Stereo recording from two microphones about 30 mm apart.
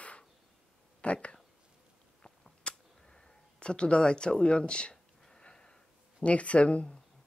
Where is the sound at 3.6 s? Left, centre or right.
Left.